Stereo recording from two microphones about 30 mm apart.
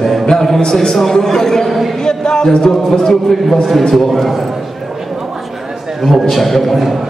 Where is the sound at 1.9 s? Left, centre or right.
Left.